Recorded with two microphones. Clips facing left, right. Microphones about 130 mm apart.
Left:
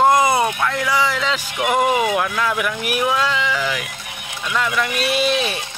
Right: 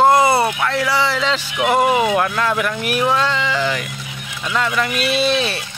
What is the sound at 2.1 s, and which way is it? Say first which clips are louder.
Speech: right 2 dB; centre (ahead or behind).